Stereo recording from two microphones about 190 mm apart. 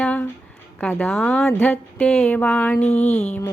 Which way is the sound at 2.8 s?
35° left (ahead or behind).